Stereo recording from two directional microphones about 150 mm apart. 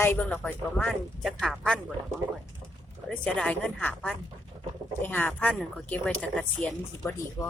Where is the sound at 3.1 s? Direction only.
5° left (ahead or behind).